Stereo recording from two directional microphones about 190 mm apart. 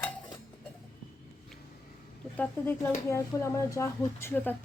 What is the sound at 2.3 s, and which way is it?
Speech, 10° left (ahead or behind).